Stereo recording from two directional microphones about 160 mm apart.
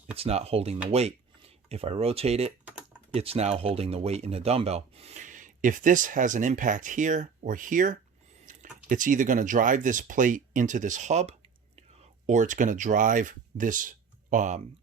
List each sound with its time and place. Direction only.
0.2 s speech: 40° right (ahead or behind)